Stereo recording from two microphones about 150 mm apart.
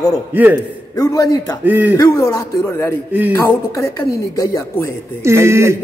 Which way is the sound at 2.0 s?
25° left (ahead or behind).